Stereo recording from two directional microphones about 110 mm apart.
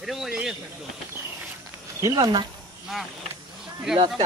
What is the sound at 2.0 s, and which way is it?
Speech, 35° right (ahead or behind).